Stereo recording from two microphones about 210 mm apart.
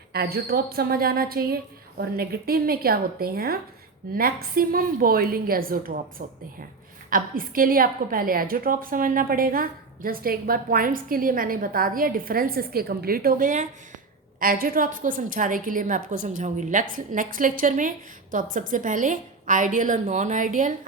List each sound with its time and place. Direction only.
0.1 s a woman's voice: 45° right (ahead or behind)